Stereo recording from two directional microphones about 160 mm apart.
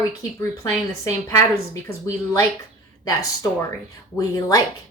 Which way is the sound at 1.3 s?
20° left (ahead or behind).